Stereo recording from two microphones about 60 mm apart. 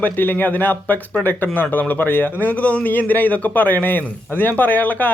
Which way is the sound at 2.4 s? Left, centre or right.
Left.